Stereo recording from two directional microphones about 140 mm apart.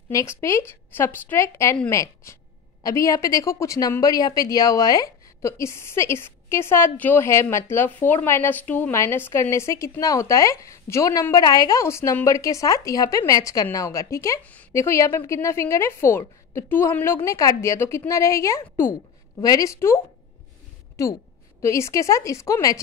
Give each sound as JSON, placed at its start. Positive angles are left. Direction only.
{"t": 0.1, "sound": "a woman's voice", "side_deg": 20}
{"t": 14.4, "sound": "speech", "side_deg": 10}
{"t": 14.7, "sound": "a woman's voice", "side_deg": 20}
{"t": 21.0, "sound": "a woman's voice", "side_deg": 20}